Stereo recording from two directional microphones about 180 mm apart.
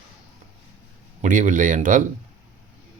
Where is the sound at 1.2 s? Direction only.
45° right (ahead or behind).